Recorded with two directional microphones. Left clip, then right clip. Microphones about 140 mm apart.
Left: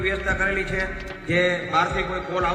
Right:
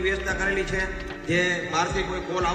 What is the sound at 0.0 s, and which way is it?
A man's voice, 30° left (ahead or behind).